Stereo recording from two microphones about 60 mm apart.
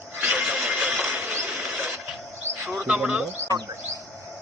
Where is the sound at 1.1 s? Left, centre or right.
Right.